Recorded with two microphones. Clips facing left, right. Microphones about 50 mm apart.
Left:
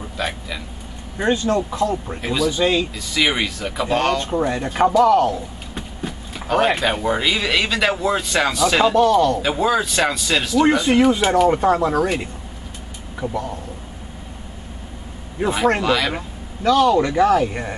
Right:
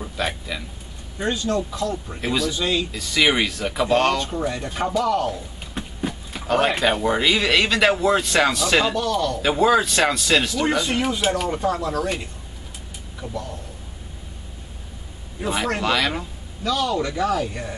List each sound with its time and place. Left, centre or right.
0.0 s a sound: centre
1.1 s speech: left
2.2 s speech: centre
2.5 s speech: left
2.9 s speech: centre
4.2 s speech: left
5.3 s speech: centre
8.9 s speech: left
9.4 s speech: centre
10.8 s speech: left
11.4 s speech: left
13.2 s speech: left
15.8 s speech: centre
16.6 s speech: left